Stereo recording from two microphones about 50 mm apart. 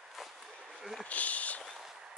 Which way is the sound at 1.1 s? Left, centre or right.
Left.